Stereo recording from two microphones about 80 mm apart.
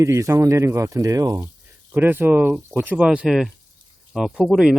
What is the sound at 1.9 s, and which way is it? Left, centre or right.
Speech, right.